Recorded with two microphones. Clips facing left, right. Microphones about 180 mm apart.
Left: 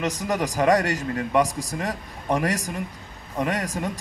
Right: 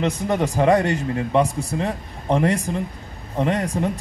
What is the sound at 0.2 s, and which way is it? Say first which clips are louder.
Speech: right 2 dB; 25° right (ahead or behind).